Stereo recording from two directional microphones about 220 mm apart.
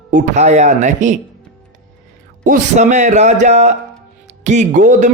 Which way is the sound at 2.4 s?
35° right (ahead or behind).